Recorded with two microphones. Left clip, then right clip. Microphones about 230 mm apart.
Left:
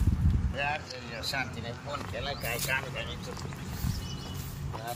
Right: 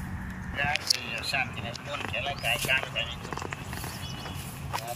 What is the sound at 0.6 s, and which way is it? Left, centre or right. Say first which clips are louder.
Speech: right 6 dB; left.